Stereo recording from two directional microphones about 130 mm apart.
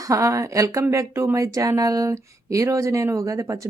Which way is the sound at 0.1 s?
25° right (ahead or behind).